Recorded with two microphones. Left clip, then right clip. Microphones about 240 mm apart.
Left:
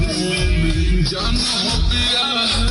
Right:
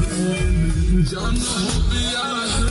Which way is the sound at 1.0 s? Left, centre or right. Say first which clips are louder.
Left 7 dB; left.